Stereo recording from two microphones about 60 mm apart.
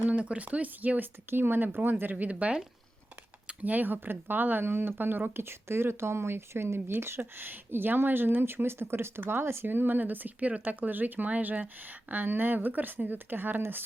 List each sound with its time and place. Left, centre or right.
0.0 s speech: right
2.3 s speech: centre; by 13.8 s right